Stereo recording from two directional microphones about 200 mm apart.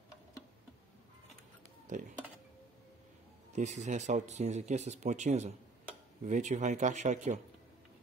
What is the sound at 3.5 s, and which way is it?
Speech, 35° right (ahead or behind).